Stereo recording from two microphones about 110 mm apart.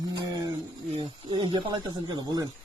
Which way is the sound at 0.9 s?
50° right (ahead or behind).